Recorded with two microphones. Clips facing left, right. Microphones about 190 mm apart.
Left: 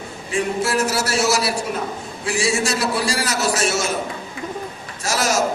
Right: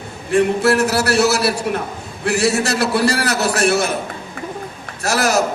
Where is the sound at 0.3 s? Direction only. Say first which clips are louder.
Right 7 dB; 65° right (ahead or behind).